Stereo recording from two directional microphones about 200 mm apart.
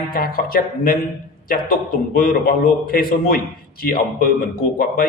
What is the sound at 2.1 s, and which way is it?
A man's voice, 45° left (ahead or behind).